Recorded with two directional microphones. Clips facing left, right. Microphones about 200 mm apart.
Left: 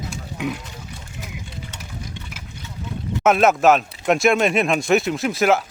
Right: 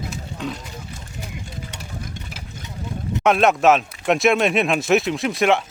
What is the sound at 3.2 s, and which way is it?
Speech, centre (ahead or behind).